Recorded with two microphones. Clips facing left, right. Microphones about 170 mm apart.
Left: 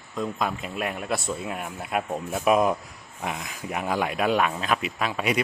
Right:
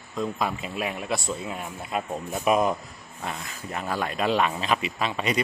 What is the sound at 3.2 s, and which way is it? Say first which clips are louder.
A man's voice: left 2 dB; 15° left (ahead or behind).